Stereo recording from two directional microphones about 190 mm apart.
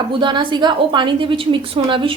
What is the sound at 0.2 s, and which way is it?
A woman's voice, 25° right (ahead or behind).